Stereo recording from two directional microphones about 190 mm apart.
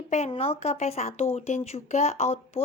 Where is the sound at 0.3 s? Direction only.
30° left (ahead or behind).